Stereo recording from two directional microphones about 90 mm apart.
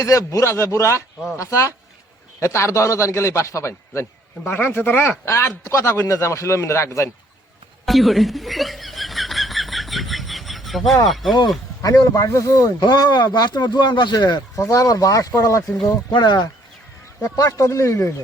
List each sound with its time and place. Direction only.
0.0 s speech: 40° left (ahead or behind)
7.9 s snicker: centre (ahead or behind)
11.0 s speech: centre (ahead or behind)
11.8 s speech: 40° left (ahead or behind)
12.8 s speech: 50° left (ahead or behind)
17.2 s speech: 40° left (ahead or behind)